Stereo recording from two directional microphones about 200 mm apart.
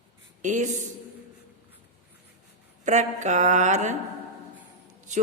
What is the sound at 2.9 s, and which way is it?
Speech, 35° right (ahead or behind).